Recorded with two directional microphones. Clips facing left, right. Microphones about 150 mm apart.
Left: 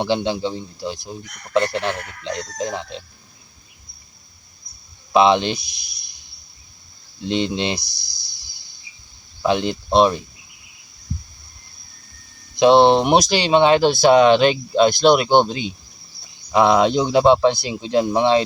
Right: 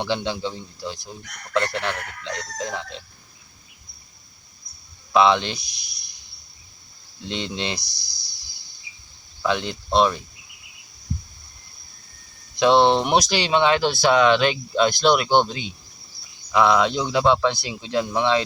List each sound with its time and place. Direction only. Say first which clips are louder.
0.0 s speech: left 5 dB; 20° left (ahead or behind)
5.1 s speech: left 3 dB; 20° left (ahead or behind)
7.3 s speech: left 7 dB; 20° left (ahead or behind)
9.4 s speech: left 5 dB; 20° left (ahead or behind)
12.5 s speech: left 4 dB; 20° left (ahead or behind)